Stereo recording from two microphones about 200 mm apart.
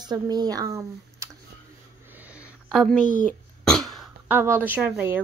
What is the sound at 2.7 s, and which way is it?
Throat clearing, 5° left (ahead or behind).